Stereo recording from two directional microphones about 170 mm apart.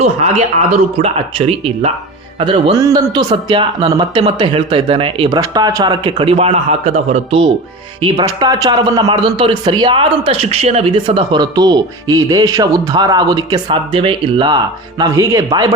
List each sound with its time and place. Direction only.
0.0 s a man's voice: 40° right (ahead or behind)
2.7 s a man's voice: 20° right (ahead or behind)
5.4 s a man's voice: 20° right (ahead or behind); by 7.4 s 40° right (ahead or behind)
8.0 s speech: 25° right (ahead or behind)